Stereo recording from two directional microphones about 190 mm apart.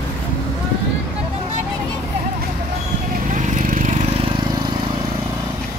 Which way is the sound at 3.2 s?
40° right (ahead or behind).